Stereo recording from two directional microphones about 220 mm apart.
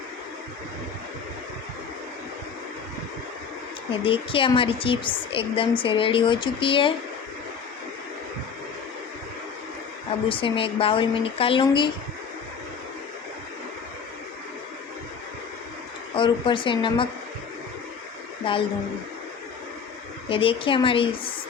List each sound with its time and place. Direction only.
3.9 s a woman's voice: 25° left (ahead or behind)
10.2 s a woman's voice: 25° left (ahead or behind)
16.1 s a woman's voice: 20° left (ahead or behind)
18.4 s a woman's voice: 25° left (ahead or behind)
20.3 s a woman's voice: 25° left (ahead or behind)